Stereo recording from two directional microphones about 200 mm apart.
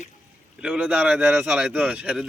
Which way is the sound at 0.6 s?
5° right (ahead or behind).